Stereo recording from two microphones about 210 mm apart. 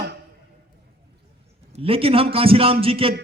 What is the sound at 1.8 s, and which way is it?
Music, 25° right (ahead or behind).